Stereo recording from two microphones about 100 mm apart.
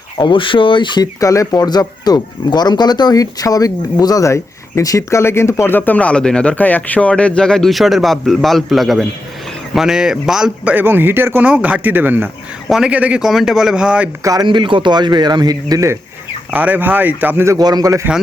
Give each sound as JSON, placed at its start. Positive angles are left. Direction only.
{"t": 0.2, "sound": "speech", "side_deg": 55}
{"t": 1.2, "sound": "a man's voice", "side_deg": 35}
{"t": 10.8, "sound": "speech", "side_deg": -20}
{"t": 12.6, "sound": "a man's voice", "side_deg": -5}
{"t": 14.4, "sound": "speech", "side_deg": -55}
{"t": 16.5, "sound": "speech", "side_deg": -15}
{"t": 17.6, "sound": "a man's voice", "side_deg": -40}